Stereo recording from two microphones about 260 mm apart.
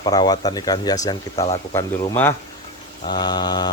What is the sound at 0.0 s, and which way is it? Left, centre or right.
Speech, centre.